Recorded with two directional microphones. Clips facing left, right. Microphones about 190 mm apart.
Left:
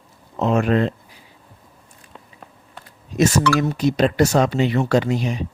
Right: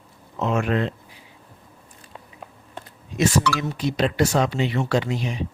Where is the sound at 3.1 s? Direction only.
50° left (ahead or behind).